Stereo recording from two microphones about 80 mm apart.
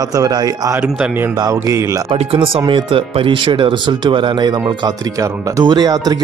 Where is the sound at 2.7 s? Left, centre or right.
Right.